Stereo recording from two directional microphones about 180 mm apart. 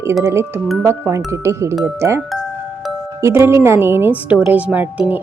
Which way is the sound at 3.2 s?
15° right (ahead or behind).